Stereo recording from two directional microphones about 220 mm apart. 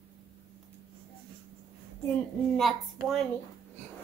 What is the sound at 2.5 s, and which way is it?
Speech, centre (ahead or behind).